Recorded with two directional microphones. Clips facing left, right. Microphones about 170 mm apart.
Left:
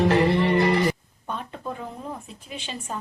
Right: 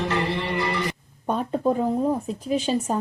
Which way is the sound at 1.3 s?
40° right (ahead or behind).